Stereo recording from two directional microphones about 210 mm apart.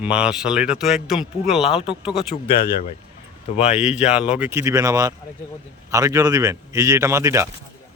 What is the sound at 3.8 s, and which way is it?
A man's voice, 5° right (ahead or behind).